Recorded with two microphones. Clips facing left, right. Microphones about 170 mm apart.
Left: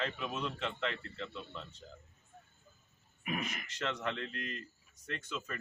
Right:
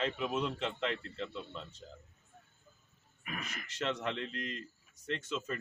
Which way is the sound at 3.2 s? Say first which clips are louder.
Left 5 dB; 15° left (ahead or behind).